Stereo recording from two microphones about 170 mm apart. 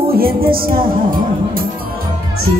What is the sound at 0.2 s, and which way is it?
Music, 60° right (ahead or behind).